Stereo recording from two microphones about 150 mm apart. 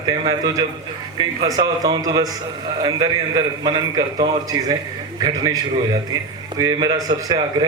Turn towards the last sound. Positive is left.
turn(degrees=-30)  # may be behind; listen again after turning